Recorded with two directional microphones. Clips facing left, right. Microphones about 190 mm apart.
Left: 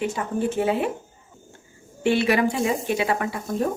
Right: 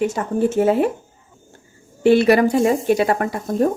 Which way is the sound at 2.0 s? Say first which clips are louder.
Right 7 dB; 40° right (ahead or behind).